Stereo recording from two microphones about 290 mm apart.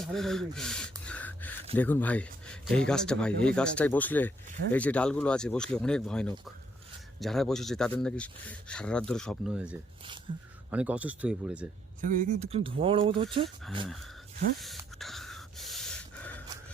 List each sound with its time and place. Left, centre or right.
0.0 s gasp: centre
1.7 s speech: centre
10.3 s speech: centre
10.7 s speech: centre
12.1 s speech: right
14.6 s a sound: centre